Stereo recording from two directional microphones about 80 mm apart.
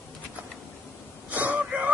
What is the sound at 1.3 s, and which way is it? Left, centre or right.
Wail, right.